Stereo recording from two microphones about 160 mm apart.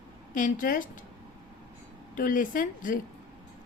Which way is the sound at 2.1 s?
60° left (ahead or behind).